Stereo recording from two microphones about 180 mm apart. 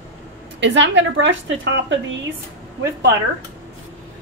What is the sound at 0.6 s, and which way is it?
A woman's voice, 90° right.